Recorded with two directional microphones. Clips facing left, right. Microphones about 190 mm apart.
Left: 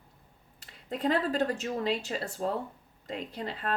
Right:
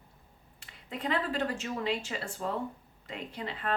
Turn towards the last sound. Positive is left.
turn(degrees=40)  # may be behind; listen again after turning